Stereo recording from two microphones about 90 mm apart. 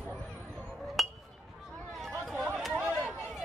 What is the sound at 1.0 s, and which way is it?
Chink, centre (ahead or behind).